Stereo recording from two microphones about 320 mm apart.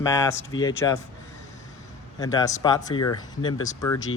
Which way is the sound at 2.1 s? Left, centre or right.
Centre.